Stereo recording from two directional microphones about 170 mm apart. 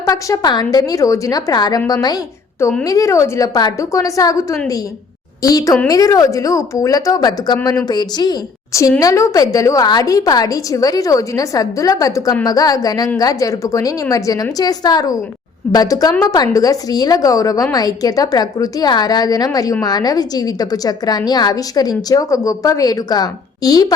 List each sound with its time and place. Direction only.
0.0 s a woman's voice: 20° left (ahead or behind)